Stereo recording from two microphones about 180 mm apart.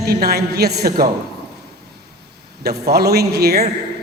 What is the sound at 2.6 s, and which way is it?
A woman's voice, 60° right (ahead or behind).